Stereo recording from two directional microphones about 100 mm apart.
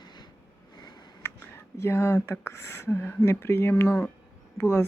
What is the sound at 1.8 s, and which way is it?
Speech, 25° left (ahead or behind).